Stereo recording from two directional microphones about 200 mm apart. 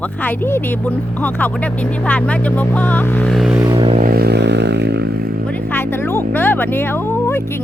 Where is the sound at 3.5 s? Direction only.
20° right (ahead or behind).